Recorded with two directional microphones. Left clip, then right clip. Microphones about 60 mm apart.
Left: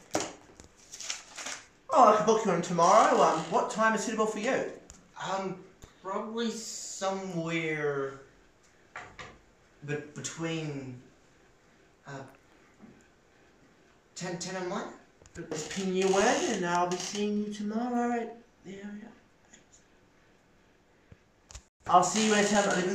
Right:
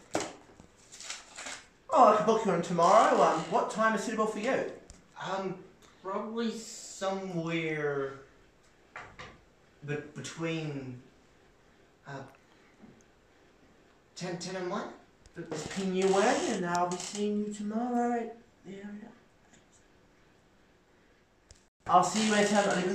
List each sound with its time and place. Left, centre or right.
1.1 s typewriter: centre
2.9 s speech: centre
3.6 s a man's voice: centre
8.9 s a sound: left
9.8 s speech: centre
12.0 s speech: centre
14.1 s speech: centre
16.6 s speech: centre
16.9 s speech: centre
17.2 s speech: centre
21.8 s speech: centre
22.1 s speech: centre